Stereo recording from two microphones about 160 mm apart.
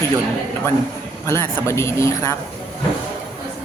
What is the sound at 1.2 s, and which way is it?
Speech, 15° left (ahead or behind).